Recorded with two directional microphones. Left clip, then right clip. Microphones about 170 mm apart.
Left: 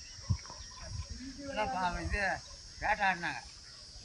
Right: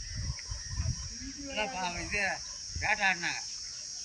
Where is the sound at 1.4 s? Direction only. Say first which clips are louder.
Left 1 dB; 30° left (ahead or behind).